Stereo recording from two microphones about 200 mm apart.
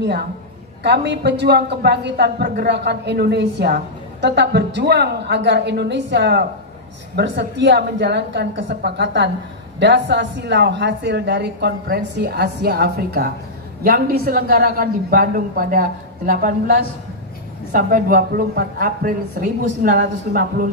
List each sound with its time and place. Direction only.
0.8 s a woman's voice: 55° right (ahead or behind)